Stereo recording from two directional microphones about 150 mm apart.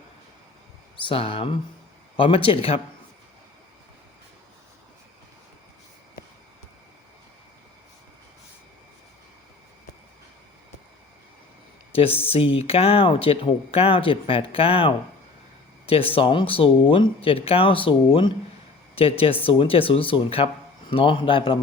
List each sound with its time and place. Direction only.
1.0 s speech: 40° left (ahead or behind)
11.9 s speech: 40° left (ahead or behind)